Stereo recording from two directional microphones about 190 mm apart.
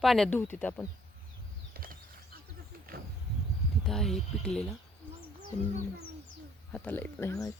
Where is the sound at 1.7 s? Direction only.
50° right (ahead or behind).